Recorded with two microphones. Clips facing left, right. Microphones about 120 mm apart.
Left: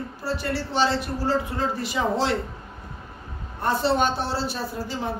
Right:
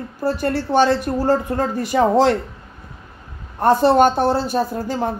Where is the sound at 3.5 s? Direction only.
50° right (ahead or behind).